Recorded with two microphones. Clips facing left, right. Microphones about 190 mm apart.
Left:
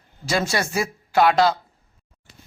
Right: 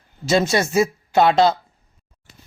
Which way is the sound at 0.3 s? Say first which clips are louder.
Right 5 dB; 25° right (ahead or behind).